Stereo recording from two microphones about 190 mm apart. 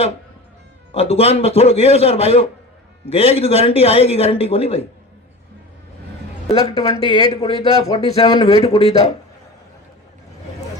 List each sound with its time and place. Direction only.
0.9 s speech: 30° left (ahead or behind)
6.5 s speech: 25° left (ahead or behind)